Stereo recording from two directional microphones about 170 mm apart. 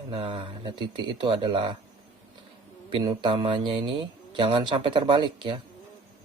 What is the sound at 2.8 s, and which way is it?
A man's voice, 30° right (ahead or behind).